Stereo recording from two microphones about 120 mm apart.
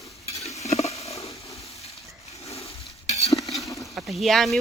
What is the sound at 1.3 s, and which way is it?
Hiss, 25° left (ahead or behind).